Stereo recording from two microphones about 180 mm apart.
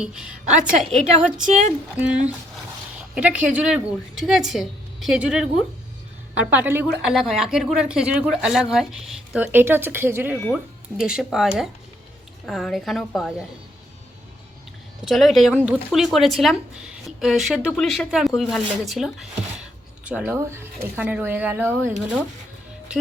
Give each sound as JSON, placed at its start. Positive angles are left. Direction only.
{"t": 0.0, "sound": "speech", "side_deg": -5}
{"t": 1.5, "sound": "speech", "side_deg": -45}
{"t": 2.0, "sound": "speech", "side_deg": -5}
{"t": 15.0, "sound": "speech", "side_deg": 0}